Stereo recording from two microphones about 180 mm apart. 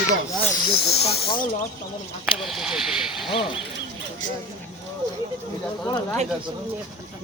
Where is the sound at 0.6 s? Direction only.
25° left (ahead or behind).